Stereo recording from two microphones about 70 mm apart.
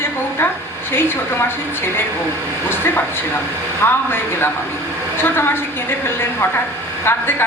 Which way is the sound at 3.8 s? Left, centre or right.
Left.